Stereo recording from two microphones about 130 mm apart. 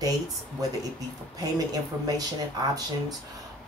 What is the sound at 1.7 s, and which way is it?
Speech, 30° right (ahead or behind).